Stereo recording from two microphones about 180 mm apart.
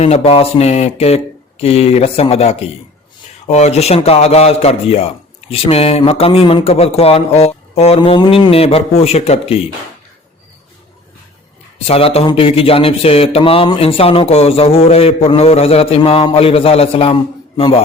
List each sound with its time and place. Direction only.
0.0 s a man's voice: 35° left (ahead or behind)
11.9 s a man's voice: 35° left (ahead or behind)